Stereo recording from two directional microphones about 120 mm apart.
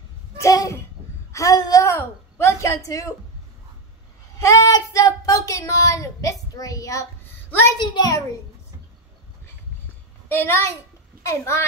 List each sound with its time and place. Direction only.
0.4 s speech: 25° left (ahead or behind)
4.4 s a child's voice: 25° left (ahead or behind)
10.2 s a child's voice: 20° left (ahead or behind)